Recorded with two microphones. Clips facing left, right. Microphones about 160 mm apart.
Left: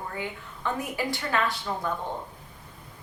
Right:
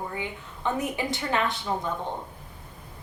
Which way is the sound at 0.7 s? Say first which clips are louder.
Right 2 dB; 20° right (ahead or behind).